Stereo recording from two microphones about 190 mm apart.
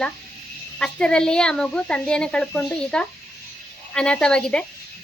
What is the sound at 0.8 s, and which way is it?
A child's voice, 5° left (ahead or behind).